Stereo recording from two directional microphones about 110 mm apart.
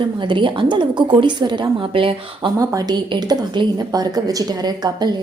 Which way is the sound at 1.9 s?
55° right (ahead or behind).